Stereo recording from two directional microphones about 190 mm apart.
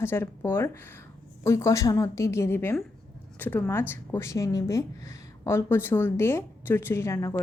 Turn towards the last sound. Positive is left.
turn(degrees=15)  # may be behind; listen again after turning